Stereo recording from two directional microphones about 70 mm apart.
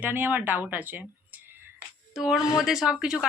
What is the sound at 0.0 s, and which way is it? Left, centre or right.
A woman's voice, right.